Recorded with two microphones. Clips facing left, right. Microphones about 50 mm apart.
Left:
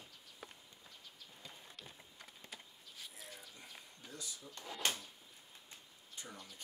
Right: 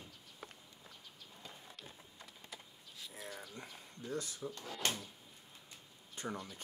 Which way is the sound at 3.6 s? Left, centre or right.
Right.